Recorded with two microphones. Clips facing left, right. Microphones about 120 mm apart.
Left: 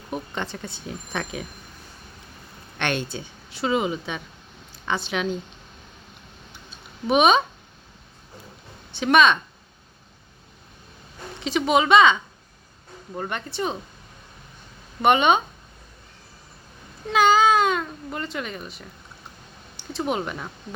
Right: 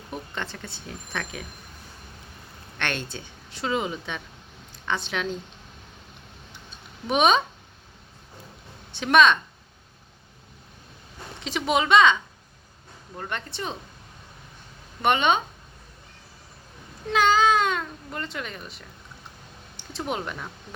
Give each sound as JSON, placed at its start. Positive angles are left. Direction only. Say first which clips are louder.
{"t": 0.1, "sound": "a woman's voice", "louder": "left 4 dB", "side_deg": 15}
{"t": 2.7, "sound": "a woman's voice", "louder": "left 4 dB", "side_deg": 15}
{"t": 6.7, "sound": "a sound", "louder": "left 5 dB", "side_deg": 5}
{"t": 8.9, "sound": "speech", "louder": "left 1 dB", "side_deg": 0}
{"t": 11.3, "sound": "speech", "louder": "left 4 dB", "side_deg": 0}
{"t": 13.1, "sound": "a woman's voice", "louder": "left 4 dB", "side_deg": 10}
{"t": 15.0, "sound": "a woman's voice", "louder": "left 4 dB", "side_deg": 10}
{"t": 17.1, "sound": "a sound", "louder": "left 2 dB", "side_deg": 10}
{"t": 19.7, "sound": "speech", "louder": "left 4 dB", "side_deg": 0}